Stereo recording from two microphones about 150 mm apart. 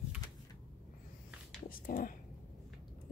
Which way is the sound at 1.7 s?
70° left (ahead or behind).